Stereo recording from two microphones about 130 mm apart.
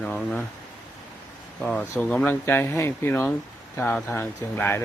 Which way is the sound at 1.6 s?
10° left (ahead or behind).